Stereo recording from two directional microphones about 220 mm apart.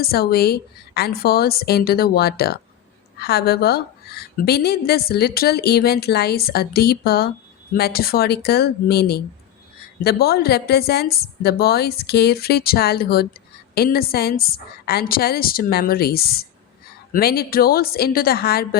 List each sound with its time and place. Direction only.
0.0 s a woman's voice: 45° left (ahead or behind)